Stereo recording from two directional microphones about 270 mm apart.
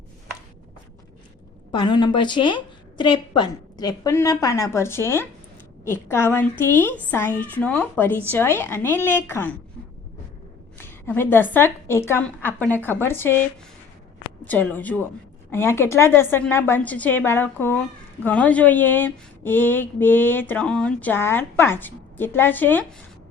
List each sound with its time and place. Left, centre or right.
1.7 s a woman's voice: centre
10.8 s a woman's voice: centre
14.4 s a woman's voice: centre